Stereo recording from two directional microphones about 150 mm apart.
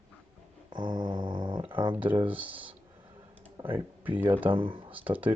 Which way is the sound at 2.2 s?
10° right (ahead or behind).